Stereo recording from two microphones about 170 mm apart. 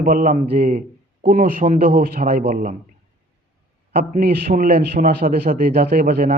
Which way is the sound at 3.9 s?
65° right (ahead or behind).